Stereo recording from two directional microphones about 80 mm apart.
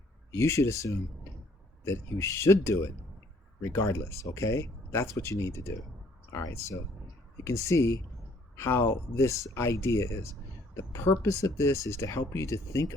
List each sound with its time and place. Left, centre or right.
0.3 s speech: left